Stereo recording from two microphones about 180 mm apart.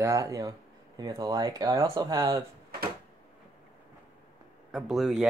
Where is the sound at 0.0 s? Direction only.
20° right (ahead or behind).